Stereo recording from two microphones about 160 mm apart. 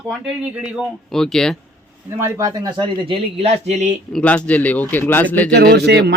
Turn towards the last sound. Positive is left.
turn(degrees=-90)